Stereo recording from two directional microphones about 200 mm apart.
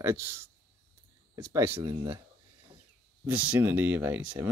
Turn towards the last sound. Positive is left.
turn(degrees=-10)  # may be behind; listen again after turning